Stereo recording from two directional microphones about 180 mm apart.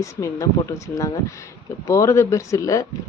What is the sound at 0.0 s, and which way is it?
Speech, 15° left (ahead or behind).